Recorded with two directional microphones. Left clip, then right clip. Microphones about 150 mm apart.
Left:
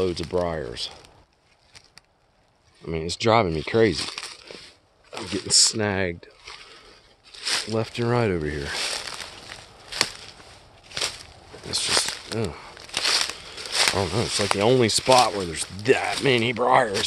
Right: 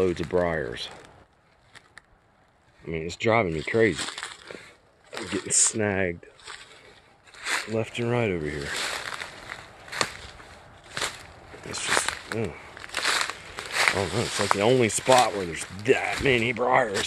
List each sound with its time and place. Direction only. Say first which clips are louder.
0.0 s speech: even; centre (ahead or behind)
2.9 s speech: left 3 dB; 30° left (ahead or behind)
3.9 s speech: left 2 dB; centre (ahead or behind)
5.7 s speech: left 1 dB; 15° left (ahead or behind)
7.4 s speech: left 2 dB; 25° left (ahead or behind)
8.4 s speech: left 2 dB; 20° left (ahead or behind)
8.8 s a sound: left 1 dB; 15° left (ahead or behind)
9.8 s a sound: left 3 dB; 25° left (ahead or behind)
11.7 s a sound: left 2 dB; 20° left (ahead or behind)
13.7 s speech: left 1 dB; 25° left (ahead or behind)
14.6 s speech: left 2 dB; 30° left (ahead or behind)
14.9 s speech: left 2 dB; 20° left (ahead or behind)